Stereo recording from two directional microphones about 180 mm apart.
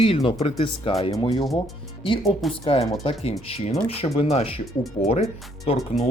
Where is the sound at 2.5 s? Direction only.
30° left (ahead or behind).